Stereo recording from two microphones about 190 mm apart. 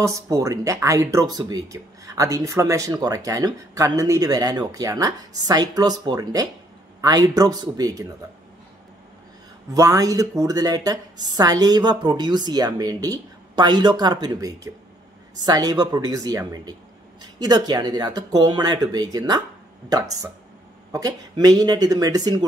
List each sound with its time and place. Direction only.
0.0 s a woman's voice: 15° right (ahead or behind)
9.8 s a woman's voice: 20° right (ahead or behind)